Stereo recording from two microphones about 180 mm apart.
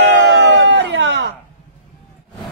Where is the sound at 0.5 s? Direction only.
90° right.